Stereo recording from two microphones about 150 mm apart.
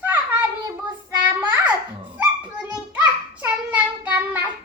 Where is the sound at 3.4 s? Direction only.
10° right (ahead or behind).